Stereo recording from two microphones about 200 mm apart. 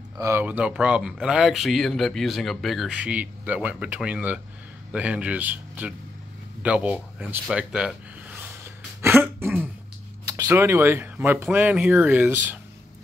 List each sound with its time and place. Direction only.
0.2 s speech: 10° right (ahead or behind)
6.6 s a sound: 5° right (ahead or behind)
10.2 s speech: 15° right (ahead or behind)